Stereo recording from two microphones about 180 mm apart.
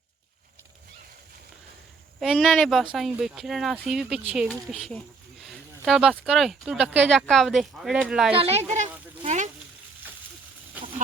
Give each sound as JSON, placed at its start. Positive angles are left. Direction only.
{"t": 2.2, "sound": "speech", "side_deg": 0}
{"t": 8.3, "sound": "speech", "side_deg": -30}
{"t": 9.2, "sound": "a sound", "side_deg": -40}